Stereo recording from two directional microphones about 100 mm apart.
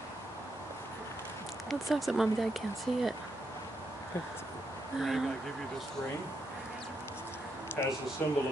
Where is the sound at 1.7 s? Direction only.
5° right (ahead or behind).